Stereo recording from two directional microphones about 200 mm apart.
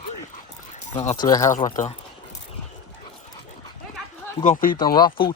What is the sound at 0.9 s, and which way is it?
Speech, 25° left (ahead or behind).